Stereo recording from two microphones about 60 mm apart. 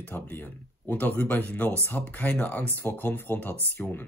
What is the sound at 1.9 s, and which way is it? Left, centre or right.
Speech, centre.